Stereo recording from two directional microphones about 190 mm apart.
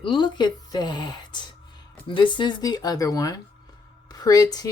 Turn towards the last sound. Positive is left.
turn(degrees=20)  # may be behind; listen again after turning